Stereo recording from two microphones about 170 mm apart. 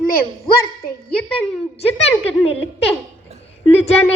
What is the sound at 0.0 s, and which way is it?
Speech, 60° left (ahead or behind).